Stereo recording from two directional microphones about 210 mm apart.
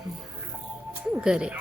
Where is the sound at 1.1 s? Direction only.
5° right (ahead or behind).